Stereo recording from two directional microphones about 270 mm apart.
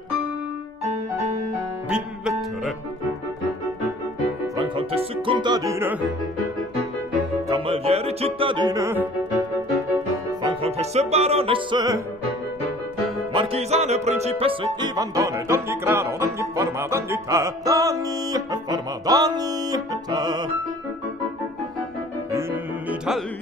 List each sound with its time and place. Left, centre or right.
1.9 s music: centre
4.6 s music: centre
7.4 s music: centre
10.4 s music: right
13.3 s music: centre
22.3 s music: centre